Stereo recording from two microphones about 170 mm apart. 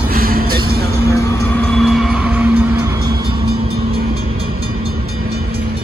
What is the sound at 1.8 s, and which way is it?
Vehicle, centre (ahead or behind).